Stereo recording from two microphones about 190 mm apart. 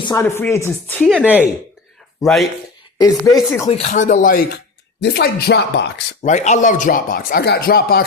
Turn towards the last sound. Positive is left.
turn(degrees=50)  # may be behind; listen again after turning